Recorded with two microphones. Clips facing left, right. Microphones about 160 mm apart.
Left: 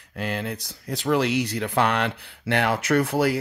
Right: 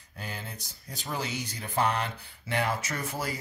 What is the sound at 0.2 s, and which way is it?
Speech, 75° left (ahead or behind).